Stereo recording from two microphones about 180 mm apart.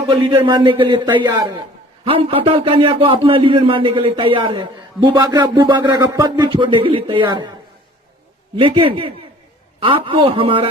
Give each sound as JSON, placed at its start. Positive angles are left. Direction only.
{"t": 0.4, "sound": "a man's voice", "side_deg": -25}
{"t": 8.5, "sound": "a man's voice", "side_deg": -30}